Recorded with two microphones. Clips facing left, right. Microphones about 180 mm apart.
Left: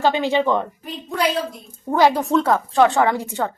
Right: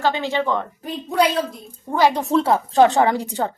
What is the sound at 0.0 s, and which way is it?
Speech, 15° left (ahead or behind).